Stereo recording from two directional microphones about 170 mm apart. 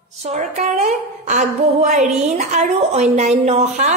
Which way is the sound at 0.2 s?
45° right (ahead or behind).